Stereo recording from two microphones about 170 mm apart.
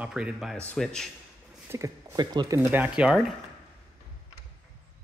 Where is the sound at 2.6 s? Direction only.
10° right (ahead or behind).